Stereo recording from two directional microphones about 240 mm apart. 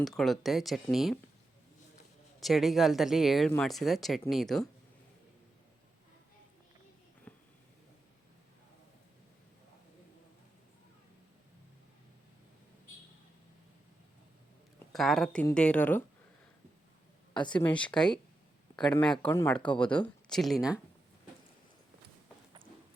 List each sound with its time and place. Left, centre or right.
0.2 s speech: centre
2.4 s speech: centre
7.3 s a sound: centre
14.9 s speech: centre
17.3 s speech: centre
17.7 s speech: centre